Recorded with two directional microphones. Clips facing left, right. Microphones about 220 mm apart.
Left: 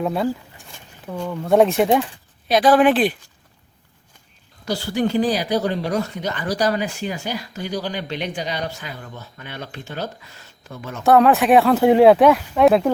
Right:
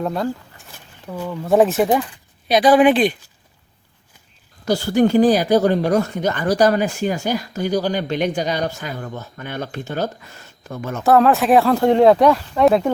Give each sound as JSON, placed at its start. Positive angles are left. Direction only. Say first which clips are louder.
{"t": 0.0, "sound": "speech", "louder": "left 1 dB", "side_deg": 5}
{"t": 4.6, "sound": "speech", "louder": "right 6 dB", "side_deg": -45}
{"t": 11.0, "sound": "speech", "louder": "even", "side_deg": 0}